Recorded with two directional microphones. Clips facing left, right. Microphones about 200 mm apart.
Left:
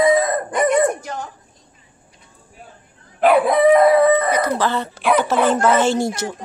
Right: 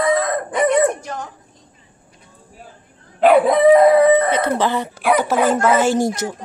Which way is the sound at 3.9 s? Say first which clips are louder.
Right 2 dB; 15° right (ahead or behind).